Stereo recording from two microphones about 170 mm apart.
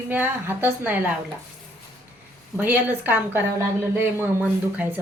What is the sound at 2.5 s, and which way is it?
A woman's voice, 10° right (ahead or behind).